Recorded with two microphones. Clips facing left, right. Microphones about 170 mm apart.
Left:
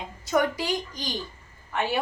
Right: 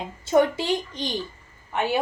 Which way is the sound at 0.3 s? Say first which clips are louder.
Right 5 dB; 25° right (ahead or behind).